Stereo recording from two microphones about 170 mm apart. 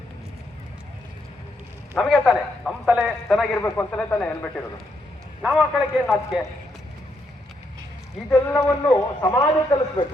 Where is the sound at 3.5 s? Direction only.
15° left (ahead or behind).